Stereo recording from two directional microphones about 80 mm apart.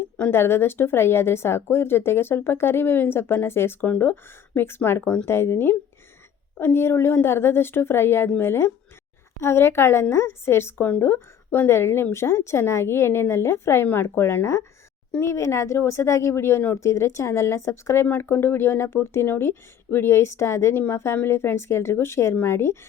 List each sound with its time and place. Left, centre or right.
0.2 s a woman's voice: left